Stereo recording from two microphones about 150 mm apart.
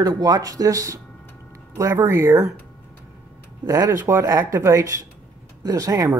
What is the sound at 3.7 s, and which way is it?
Speech, 20° right (ahead or behind).